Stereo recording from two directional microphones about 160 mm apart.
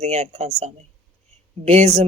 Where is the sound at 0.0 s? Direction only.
40° right (ahead or behind).